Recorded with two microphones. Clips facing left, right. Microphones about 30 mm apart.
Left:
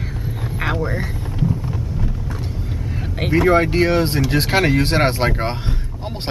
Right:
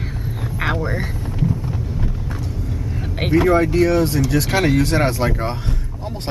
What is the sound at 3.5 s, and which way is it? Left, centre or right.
Speech, left.